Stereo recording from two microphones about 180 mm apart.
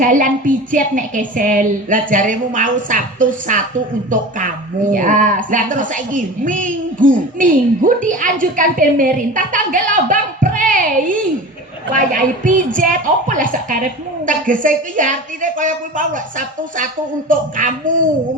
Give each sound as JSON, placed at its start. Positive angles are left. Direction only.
{"t": 0.0, "sound": "speech", "side_deg": -45}